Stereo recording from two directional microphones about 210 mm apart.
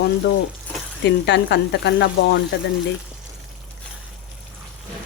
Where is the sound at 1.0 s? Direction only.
55° left (ahead or behind).